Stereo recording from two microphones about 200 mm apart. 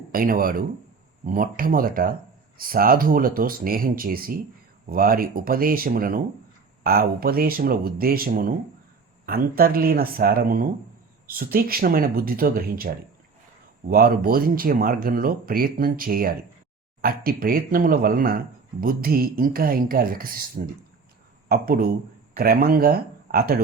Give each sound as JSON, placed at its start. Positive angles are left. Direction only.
{"t": 0.1, "sound": "speech", "side_deg": -45}